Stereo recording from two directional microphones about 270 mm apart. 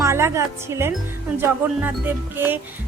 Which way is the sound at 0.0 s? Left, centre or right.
Centre.